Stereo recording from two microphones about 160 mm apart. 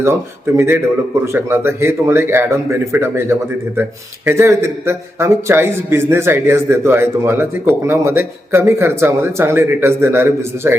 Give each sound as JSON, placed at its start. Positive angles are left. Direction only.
{"t": 0.0, "sound": "a man's voice", "side_deg": -15}